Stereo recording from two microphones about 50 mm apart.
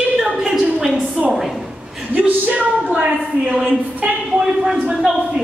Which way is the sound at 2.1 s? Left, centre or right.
Right.